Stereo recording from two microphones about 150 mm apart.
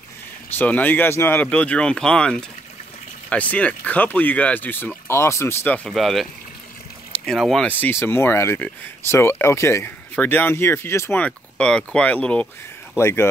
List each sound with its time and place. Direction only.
0.6 s speech: 10° left (ahead or behind)
5.9 s speech: centre (ahead or behind)